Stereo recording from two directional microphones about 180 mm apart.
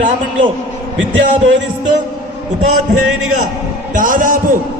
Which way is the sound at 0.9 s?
90° right.